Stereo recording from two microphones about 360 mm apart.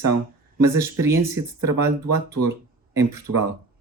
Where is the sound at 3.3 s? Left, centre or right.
Right.